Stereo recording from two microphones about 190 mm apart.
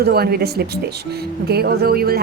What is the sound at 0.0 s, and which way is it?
A woman's voice, 55° right (ahead or behind).